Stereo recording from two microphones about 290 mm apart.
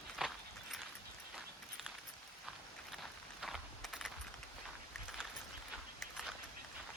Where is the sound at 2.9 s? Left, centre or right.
Centre.